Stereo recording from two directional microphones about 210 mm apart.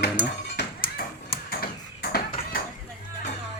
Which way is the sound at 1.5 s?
45° left (ahead or behind).